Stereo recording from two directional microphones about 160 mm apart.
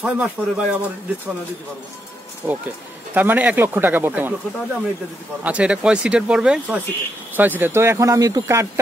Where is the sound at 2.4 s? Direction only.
15° right (ahead or behind).